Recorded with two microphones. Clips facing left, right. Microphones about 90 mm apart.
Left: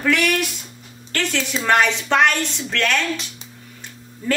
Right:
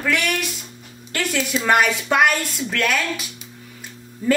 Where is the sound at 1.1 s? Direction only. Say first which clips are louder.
Right 1 dB; 10° right (ahead or behind).